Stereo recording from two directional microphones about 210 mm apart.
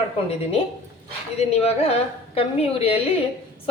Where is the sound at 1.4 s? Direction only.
30° left (ahead or behind).